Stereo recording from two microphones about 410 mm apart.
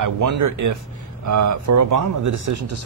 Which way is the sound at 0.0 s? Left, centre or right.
Right.